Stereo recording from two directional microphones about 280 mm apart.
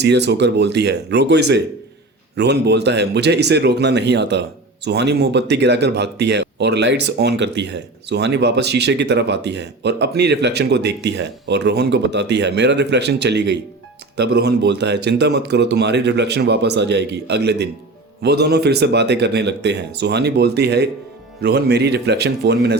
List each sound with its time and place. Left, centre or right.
0.0 s speech: right